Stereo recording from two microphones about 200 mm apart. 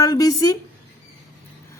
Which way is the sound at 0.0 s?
20° left (ahead or behind).